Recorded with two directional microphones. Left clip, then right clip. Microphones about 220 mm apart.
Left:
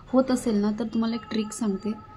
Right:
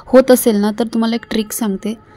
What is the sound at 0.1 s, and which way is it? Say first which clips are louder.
A woman's voice: right 14 dB; 40° right (ahead or behind).